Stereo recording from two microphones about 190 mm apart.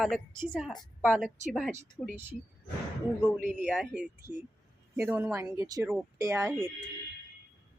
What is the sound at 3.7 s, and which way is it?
A woman's voice, 5° right (ahead or behind).